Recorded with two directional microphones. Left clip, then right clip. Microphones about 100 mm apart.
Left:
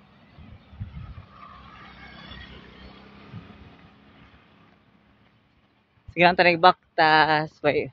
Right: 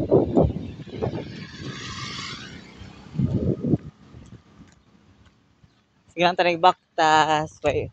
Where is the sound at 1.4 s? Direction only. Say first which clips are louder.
Right 6 dB; 15° left (ahead or behind).